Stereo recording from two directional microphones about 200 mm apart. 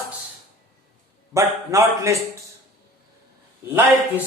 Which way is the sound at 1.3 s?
15° right (ahead or behind).